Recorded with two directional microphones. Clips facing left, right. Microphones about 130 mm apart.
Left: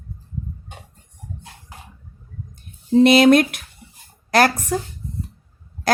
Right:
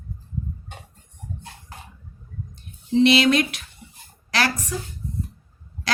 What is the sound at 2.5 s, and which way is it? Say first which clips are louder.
Speech: left 5 dB; 45° left (ahead or behind).